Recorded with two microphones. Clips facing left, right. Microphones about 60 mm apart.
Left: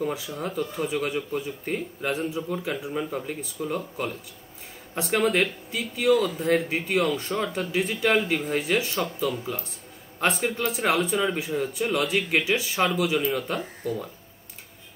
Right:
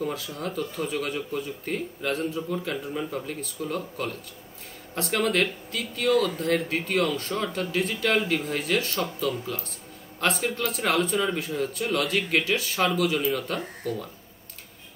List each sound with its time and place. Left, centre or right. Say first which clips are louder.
0.0 s speech: left 1 dB; centre